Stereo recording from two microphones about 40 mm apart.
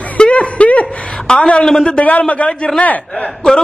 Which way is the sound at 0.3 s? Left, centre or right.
Left.